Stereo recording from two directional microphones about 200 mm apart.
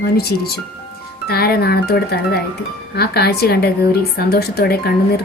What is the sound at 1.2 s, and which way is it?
A woman's voice, 50° left (ahead or behind).